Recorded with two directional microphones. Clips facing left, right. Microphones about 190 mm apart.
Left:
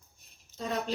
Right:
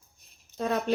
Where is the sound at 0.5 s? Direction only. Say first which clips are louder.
Right 6 dB; 60° right (ahead or behind).